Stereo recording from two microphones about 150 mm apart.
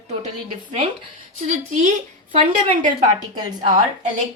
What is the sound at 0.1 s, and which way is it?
A woman's voice, 55° right (ahead or behind).